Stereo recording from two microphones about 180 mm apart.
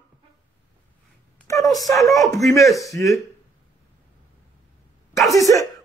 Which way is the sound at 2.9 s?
15° left (ahead or behind).